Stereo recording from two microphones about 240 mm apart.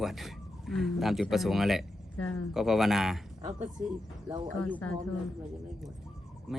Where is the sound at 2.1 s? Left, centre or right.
Left.